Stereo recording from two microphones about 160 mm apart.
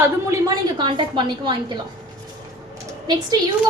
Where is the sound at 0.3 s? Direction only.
25° right (ahead or behind).